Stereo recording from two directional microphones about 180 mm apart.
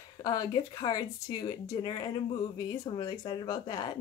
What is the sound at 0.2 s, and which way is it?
Speech, 20° left (ahead or behind).